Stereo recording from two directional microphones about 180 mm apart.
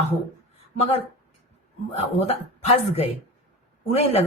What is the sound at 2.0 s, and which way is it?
Speech, 35° left (ahead or behind).